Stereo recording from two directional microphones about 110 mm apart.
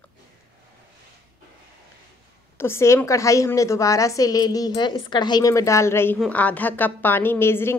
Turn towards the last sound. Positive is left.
turn(degrees=20)  # may be behind; listen again after turning